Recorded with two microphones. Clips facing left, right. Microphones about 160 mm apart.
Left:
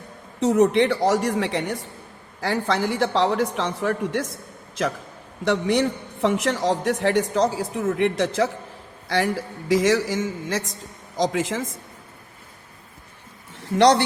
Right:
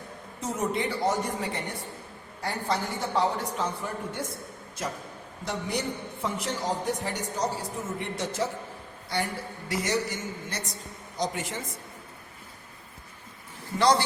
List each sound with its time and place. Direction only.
0.3 s a woman's voice: 70° left (ahead or behind); by 4.3 s 90° left
5.5 s a man's voice: 80° left
13.7 s speech: 70° left (ahead or behind)